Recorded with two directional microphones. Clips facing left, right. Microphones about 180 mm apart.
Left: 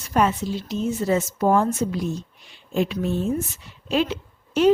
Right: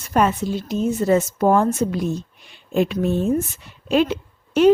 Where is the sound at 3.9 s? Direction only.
55° right (ahead or behind).